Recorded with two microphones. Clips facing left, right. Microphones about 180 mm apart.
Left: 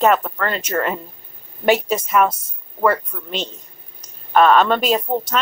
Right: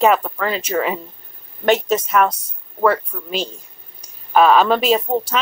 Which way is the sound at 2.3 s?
25° left (ahead or behind).